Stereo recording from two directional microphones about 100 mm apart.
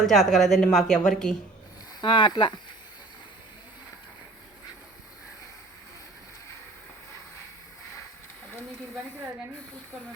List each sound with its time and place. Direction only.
0.0 s a woman's voice: centre (ahead or behind)
2.0 s speech: 50° left (ahead or behind)